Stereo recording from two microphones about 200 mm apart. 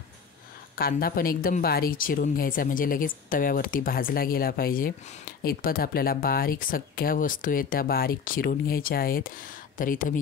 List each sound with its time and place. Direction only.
0.7 s speech: 50° left (ahead or behind)